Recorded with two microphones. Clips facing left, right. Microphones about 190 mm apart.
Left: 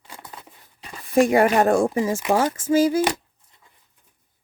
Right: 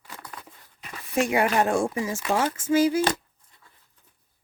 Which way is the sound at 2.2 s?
20° left (ahead or behind).